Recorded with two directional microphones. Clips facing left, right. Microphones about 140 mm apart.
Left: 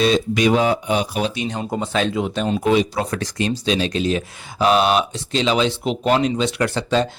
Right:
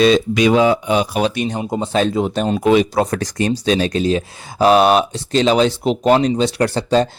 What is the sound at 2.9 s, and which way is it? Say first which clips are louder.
Speech: right 5 dB; 40° right (ahead or behind).